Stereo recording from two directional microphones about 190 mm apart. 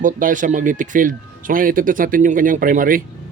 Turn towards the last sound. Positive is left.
turn(degrees=-45)  # may be behind; listen again after turning